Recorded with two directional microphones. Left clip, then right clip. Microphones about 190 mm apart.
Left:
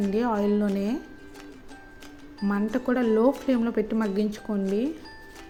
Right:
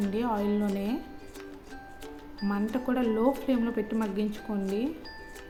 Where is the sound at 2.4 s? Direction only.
20° left (ahead or behind).